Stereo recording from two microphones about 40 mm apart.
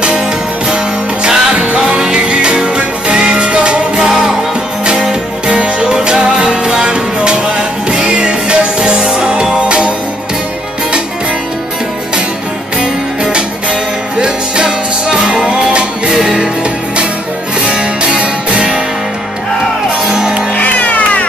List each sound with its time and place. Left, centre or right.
1.2 s music: right
4.1 s music: centre
5.5 s music: right
12.8 s music: right
17.6 s music: right
20.1 s music: centre
20.5 s music: left